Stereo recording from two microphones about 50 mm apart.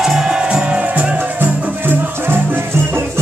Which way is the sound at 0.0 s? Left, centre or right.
Centre.